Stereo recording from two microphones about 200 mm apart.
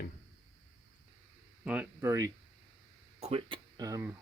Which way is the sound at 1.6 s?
10° right (ahead or behind).